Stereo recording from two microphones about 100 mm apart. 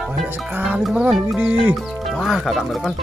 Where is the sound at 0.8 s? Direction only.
5° right (ahead or behind).